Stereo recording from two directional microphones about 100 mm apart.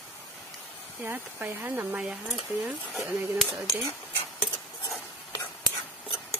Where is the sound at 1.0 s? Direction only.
20° right (ahead or behind).